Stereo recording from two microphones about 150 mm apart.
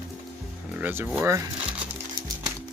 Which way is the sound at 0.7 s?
10° right (ahead or behind).